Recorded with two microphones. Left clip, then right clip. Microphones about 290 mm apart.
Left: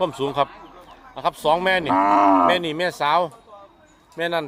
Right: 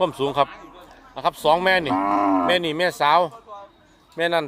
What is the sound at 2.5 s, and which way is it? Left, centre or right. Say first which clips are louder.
A man's voice: even; centre.